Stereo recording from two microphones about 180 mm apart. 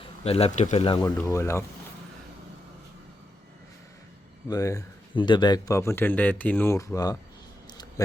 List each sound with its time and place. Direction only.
0.3 s speech: 35° left (ahead or behind)
1.3 s a man's voice: 15° left (ahead or behind)
4.4 s a man's voice: 20° left (ahead or behind)
7.7 s a sound: 20° left (ahead or behind)